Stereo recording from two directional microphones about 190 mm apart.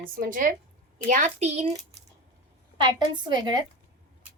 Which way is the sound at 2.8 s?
25° right (ahead or behind).